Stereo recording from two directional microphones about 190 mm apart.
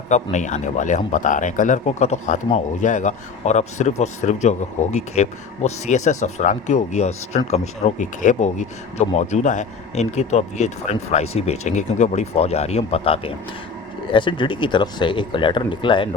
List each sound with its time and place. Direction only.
0.1 s speech: 40° left (ahead or behind)